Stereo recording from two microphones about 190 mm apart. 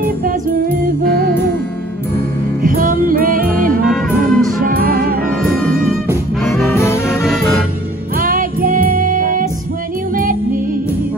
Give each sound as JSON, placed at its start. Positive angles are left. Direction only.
{"t": 0.2, "sound": "music", "side_deg": -45}
{"t": 2.6, "sound": "music", "side_deg": -45}
{"t": 6.4, "sound": "music", "side_deg": 0}
{"t": 8.2, "sound": "music", "side_deg": -45}